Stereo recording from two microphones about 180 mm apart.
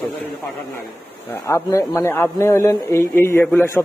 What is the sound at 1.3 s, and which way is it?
A man's voice, 15° left (ahead or behind).